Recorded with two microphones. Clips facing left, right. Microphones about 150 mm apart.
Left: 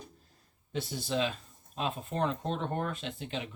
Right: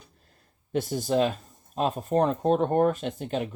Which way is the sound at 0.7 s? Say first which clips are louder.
Right 8 dB; 50° right (ahead or behind).